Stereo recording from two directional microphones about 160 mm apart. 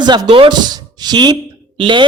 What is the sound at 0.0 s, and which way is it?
Speech, 25° right (ahead or behind).